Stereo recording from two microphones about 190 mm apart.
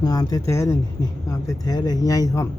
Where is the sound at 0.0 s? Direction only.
20° left (ahead or behind).